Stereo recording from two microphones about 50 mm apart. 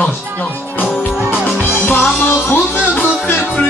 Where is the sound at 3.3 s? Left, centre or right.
Left.